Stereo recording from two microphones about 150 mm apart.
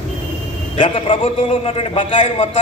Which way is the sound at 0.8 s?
35° left (ahead or behind).